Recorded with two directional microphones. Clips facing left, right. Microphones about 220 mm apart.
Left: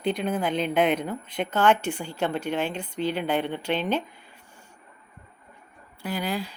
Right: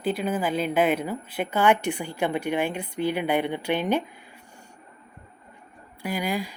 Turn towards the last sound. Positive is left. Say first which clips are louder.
# right 1 dB
turn(degrees=-10)  # may be behind; listen again after turning